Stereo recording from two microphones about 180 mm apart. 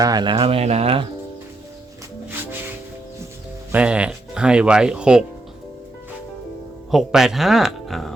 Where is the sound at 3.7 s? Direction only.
5° right (ahead or behind).